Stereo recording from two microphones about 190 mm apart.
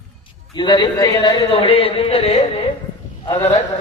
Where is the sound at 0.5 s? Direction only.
25° left (ahead or behind).